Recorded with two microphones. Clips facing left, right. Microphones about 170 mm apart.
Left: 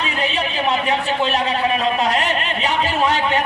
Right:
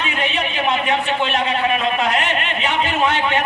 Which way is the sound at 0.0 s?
35° left (ahead or behind).